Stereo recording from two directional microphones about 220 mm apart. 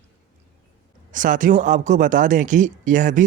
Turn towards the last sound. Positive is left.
turn(degrees=-35)  # may be behind; listen again after turning